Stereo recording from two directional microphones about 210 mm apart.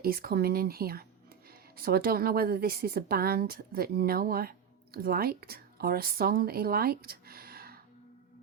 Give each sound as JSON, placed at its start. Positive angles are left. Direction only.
{"t": 0.0, "sound": "a woman's voice", "side_deg": -45}